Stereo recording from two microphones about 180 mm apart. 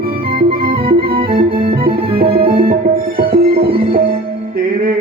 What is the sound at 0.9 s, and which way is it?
Music, 55° right (ahead or behind).